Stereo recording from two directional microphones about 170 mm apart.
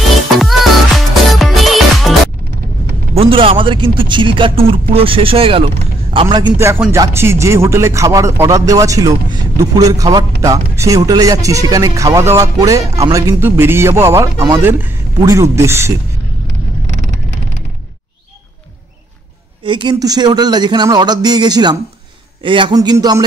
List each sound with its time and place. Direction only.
0.4 s music: centre (ahead or behind)
3.2 s a man's voice: 30° right (ahead or behind); by 16.0 s 15° right (ahead or behind)
19.6 s speech: 30° right (ahead or behind)